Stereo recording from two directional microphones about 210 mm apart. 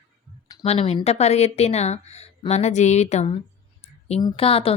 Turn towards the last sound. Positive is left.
turn(degrees=25)  # may be behind; listen again after turning